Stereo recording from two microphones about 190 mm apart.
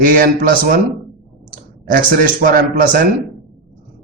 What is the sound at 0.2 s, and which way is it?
Speech, 45° right (ahead or behind).